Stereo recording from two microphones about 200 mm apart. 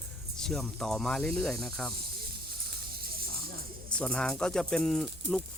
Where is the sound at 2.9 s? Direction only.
50° right (ahead or behind).